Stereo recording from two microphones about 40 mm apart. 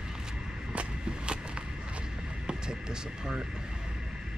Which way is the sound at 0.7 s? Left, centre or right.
Right.